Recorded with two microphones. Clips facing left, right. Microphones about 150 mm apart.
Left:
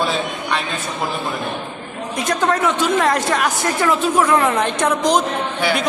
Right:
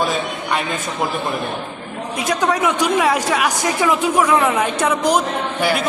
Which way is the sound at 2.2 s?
10° right (ahead or behind).